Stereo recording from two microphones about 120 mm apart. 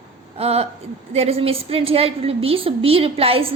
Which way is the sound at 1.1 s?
55° right (ahead or behind).